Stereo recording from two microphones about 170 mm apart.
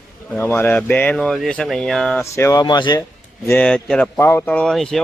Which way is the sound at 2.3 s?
20° left (ahead or behind).